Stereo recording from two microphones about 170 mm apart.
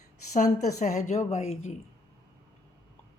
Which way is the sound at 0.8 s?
45° left (ahead or behind).